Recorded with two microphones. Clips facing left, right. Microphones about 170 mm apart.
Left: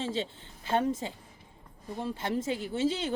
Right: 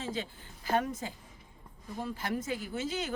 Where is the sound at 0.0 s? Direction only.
25° left (ahead or behind).